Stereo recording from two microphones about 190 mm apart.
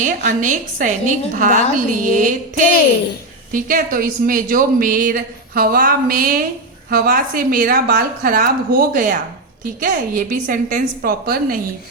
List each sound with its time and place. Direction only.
0.0 s speech: 40° right (ahead or behind)